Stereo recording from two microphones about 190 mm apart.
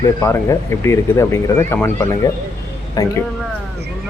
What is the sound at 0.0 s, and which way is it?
Speech, 15° left (ahead or behind).